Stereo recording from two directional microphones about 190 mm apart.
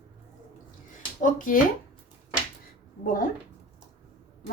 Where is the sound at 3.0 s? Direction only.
45° left (ahead or behind).